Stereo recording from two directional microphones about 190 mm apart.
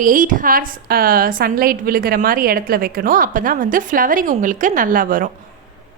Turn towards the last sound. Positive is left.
turn(degrees=-45)  # may be behind; listen again after turning